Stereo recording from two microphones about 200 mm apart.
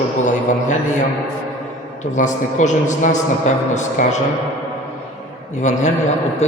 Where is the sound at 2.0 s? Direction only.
35° left (ahead or behind).